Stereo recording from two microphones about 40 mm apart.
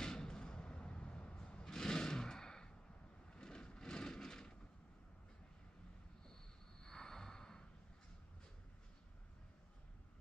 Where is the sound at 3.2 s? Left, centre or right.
Left.